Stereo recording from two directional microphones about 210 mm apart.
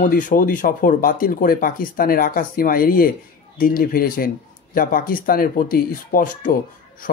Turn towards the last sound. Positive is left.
turn(degrees=40)  # may be behind; listen again after turning